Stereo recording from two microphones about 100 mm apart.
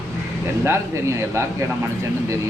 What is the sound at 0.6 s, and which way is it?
Speech, 25° right (ahead or behind).